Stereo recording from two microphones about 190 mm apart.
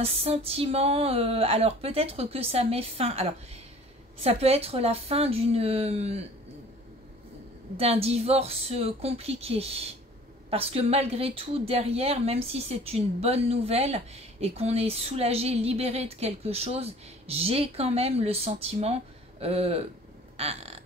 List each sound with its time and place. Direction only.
0.0 s a woman's voice: 30° right (ahead or behind)
7.7 s a woman's voice: 30° right (ahead or behind)
20.3 s burping: 30° right (ahead or behind)